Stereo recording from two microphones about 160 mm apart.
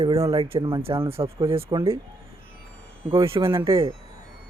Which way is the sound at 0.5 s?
35° right (ahead or behind).